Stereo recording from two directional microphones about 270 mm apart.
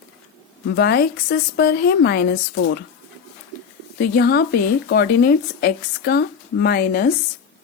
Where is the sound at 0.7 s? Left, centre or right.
Left.